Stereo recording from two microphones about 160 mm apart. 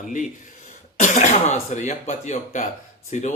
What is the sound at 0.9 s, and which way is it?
Speech, 50° left (ahead or behind).